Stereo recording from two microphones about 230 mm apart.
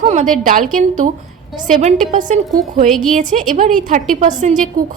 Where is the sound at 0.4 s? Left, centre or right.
Right.